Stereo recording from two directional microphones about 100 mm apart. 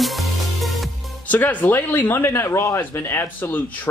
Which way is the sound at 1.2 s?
15° left (ahead or behind).